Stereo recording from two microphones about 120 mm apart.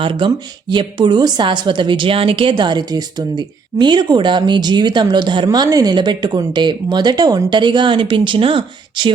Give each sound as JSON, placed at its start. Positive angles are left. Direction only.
{"t": 0.0, "sound": "a woman's voice", "side_deg": -45}